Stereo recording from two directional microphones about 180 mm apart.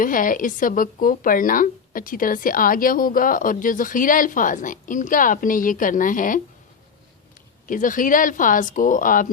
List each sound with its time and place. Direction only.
0.0 s speech: 50° left (ahead or behind)
7.7 s speech: 50° left (ahead or behind)